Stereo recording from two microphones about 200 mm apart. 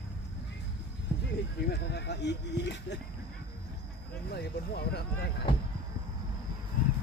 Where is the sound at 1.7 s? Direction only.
55° left (ahead or behind).